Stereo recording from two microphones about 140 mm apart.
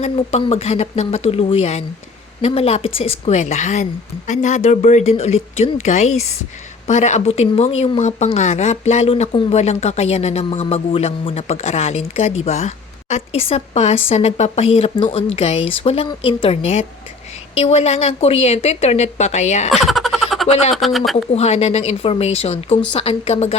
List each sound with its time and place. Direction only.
0.0 s speech: 45° left (ahead or behind)
19.8 s a sound: centre (ahead or behind)
20.5 s speech: 50° left (ahead or behind)
20.8 s speech: centre (ahead or behind)
21.2 s speech: 50° left (ahead or behind)